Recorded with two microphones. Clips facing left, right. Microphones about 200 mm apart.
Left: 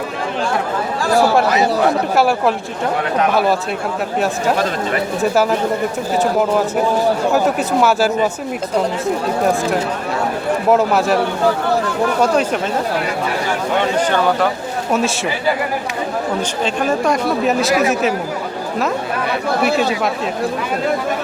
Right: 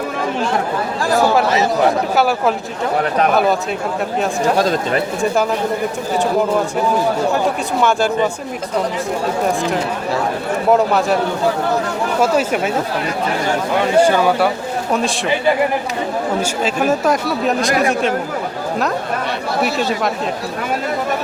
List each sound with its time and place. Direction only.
2.1 s speech: centre (ahead or behind)
4.5 s speech: 35° right (ahead or behind)
7.8 s speech: 5° left (ahead or behind)
10.7 s speech: centre (ahead or behind)
12.2 s speech: 5° right (ahead or behind)
14.0 s speech: 10° right (ahead or behind)
14.9 s speech: centre (ahead or behind)
16.4 s speech: 5° right (ahead or behind)